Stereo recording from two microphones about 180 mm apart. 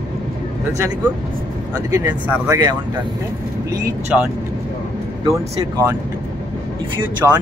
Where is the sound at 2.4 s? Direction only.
15° right (ahead or behind).